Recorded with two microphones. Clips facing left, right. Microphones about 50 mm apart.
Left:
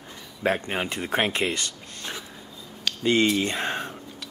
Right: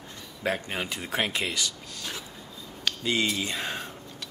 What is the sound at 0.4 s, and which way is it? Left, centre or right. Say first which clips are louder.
Speech: left 4 dB; left.